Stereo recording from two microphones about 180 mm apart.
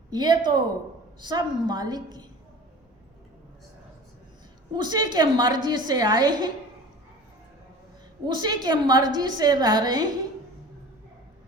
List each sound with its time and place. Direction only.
0.1 s a woman's voice: 25° right (ahead or behind)
4.8 s a woman's voice: 25° right (ahead or behind)
8.3 s a woman's voice: 25° right (ahead or behind)